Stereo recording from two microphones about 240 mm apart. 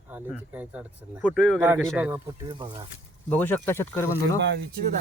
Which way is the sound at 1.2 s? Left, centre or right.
Centre.